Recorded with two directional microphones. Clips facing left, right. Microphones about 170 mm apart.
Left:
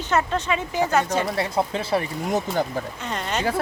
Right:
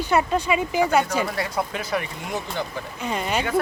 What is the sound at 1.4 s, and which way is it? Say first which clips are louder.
Speech: left 3 dB; 30° left (ahead or behind).